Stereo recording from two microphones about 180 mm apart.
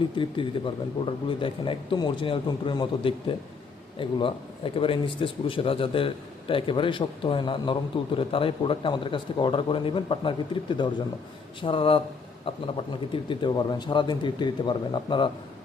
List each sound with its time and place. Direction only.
0.2 s a man's voice: 30° left (ahead or behind)